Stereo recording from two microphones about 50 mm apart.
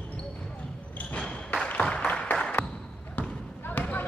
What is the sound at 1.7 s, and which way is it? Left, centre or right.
Applause, left.